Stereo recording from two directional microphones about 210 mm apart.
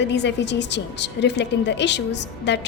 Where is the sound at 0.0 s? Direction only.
55° left (ahead or behind).